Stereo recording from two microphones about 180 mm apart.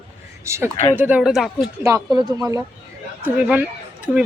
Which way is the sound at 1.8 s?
15° right (ahead or behind).